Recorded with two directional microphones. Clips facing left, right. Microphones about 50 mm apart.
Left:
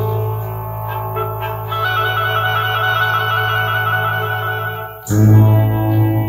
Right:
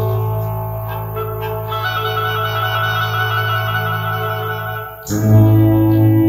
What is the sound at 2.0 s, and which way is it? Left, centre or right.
Music, left.